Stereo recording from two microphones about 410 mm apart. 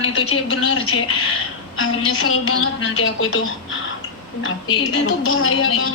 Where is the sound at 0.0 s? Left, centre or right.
Centre.